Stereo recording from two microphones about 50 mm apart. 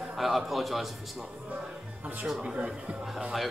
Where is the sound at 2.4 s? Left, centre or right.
Right.